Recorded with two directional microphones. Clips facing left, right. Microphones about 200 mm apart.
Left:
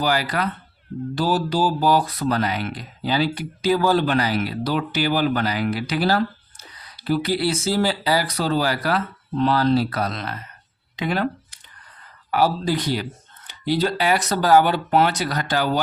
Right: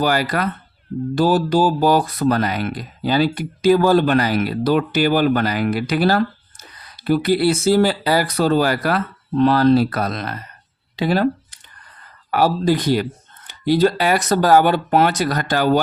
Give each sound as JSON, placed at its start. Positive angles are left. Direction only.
{"t": 0.0, "sound": "speech", "side_deg": -50}
{"t": 10.9, "sound": "speech", "side_deg": -35}
{"t": 12.3, "sound": "speech", "side_deg": -50}